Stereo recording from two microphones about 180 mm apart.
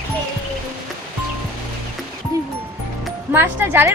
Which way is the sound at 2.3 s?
20° right (ahead or behind).